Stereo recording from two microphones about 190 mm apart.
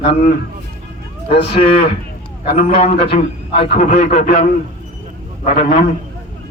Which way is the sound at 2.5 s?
35° left (ahead or behind).